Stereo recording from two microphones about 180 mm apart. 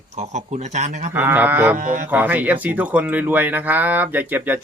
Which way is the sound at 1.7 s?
50° right (ahead or behind).